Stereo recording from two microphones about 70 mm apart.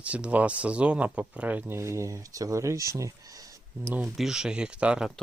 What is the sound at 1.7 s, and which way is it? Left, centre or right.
Speech, right.